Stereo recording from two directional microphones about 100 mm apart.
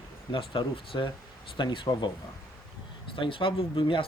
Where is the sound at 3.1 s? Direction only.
60° left (ahead or behind).